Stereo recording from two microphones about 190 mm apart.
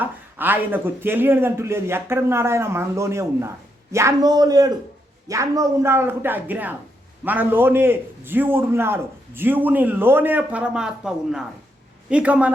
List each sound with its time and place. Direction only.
0.0 s a man's voice: 10° right (ahead or behind)